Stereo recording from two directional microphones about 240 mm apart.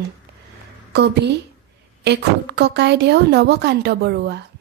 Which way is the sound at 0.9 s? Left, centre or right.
Right.